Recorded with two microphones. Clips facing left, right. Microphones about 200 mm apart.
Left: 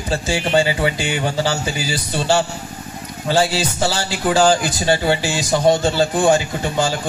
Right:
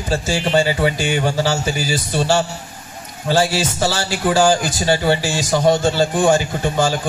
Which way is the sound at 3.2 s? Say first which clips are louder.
Right 1 dB; 15° left (ahead or behind).